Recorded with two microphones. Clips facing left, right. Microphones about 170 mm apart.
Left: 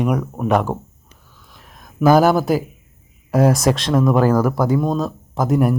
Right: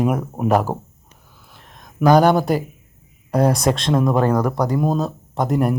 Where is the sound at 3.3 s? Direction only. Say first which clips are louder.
Left 2 dB; centre (ahead or behind).